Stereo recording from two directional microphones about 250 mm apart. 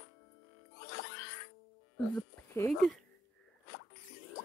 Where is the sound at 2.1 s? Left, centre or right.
Centre.